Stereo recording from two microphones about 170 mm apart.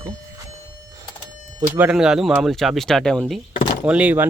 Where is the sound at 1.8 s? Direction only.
5° right (ahead or behind).